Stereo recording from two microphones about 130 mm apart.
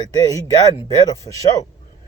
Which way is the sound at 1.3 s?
25° left (ahead or behind).